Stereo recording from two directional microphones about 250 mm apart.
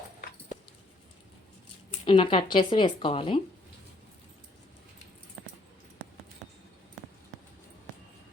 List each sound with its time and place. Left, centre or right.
2.0 s a woman's voice: centre